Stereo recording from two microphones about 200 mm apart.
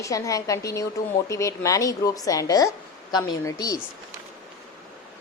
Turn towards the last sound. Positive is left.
turn(degrees=20)  # may be behind; listen again after turning